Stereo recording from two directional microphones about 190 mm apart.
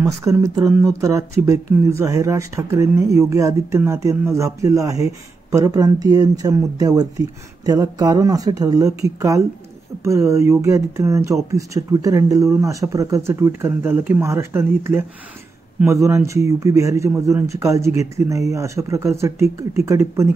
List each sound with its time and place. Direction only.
0.0 s speech: 15° right (ahead or behind)